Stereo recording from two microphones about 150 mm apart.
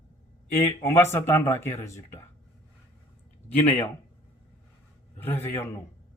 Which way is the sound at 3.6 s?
10° left (ahead or behind).